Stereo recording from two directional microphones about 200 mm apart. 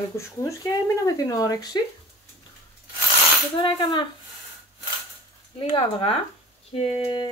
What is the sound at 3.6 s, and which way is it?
Speech, 25° left (ahead or behind).